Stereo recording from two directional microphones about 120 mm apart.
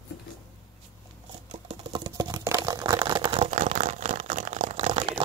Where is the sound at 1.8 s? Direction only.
45° right (ahead or behind).